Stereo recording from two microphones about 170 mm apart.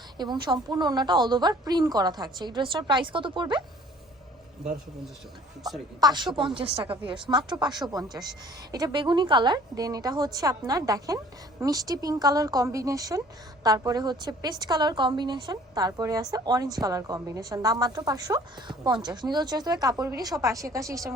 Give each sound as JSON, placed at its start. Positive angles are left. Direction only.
{"t": 0.2, "sound": "a woman's voice", "side_deg": -25}
{"t": 6.0, "sound": "a woman's voice", "side_deg": -25}